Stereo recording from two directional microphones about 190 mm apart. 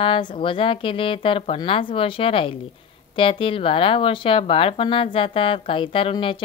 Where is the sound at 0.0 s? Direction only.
25° left (ahead or behind).